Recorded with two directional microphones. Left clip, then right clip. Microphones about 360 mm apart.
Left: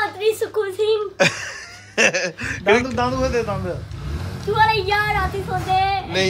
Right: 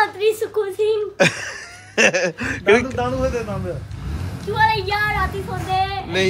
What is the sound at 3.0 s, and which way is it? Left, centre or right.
Speech, left.